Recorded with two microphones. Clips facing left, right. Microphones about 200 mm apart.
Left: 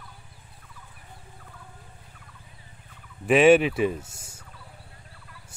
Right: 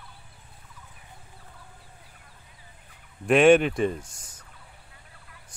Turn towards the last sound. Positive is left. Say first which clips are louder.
# left 1 dB
turn(degrees=10)  # may be behind; listen again after turning